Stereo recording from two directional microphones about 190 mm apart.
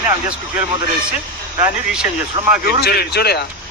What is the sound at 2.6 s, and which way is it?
Speech, 55° left (ahead or behind).